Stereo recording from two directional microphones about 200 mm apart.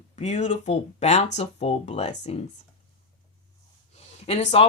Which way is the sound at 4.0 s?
30° left (ahead or behind).